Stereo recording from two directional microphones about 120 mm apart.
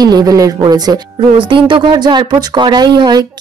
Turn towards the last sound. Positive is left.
turn(degrees=-35)  # may be behind; listen again after turning